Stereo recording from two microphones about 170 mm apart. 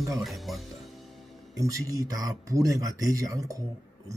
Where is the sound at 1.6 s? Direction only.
20° right (ahead or behind).